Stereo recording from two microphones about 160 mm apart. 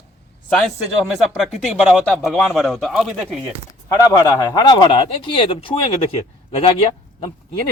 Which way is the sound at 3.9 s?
20° left (ahead or behind).